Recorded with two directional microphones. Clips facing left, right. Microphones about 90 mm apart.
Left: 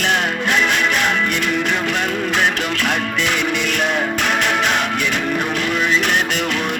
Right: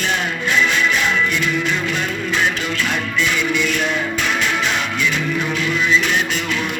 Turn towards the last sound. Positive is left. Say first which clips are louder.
# left 2 dB
turn(degrees=65)  # may be behind; listen again after turning